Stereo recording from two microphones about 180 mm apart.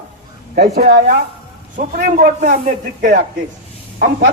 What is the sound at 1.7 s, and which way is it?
Speech, 45° right (ahead or behind).